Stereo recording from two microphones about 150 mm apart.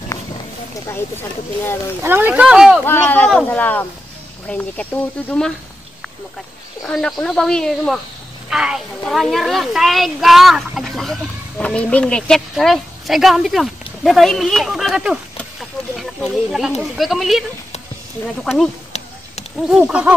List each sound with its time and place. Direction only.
0.8 s speech: 15° left (ahead or behind)
2.0 s speech: 15° right (ahead or behind)
2.8 s speech: 15° left (ahead or behind)
6.9 s a woman's voice: 5° left (ahead or behind)
19.7 s speech: 5° right (ahead or behind)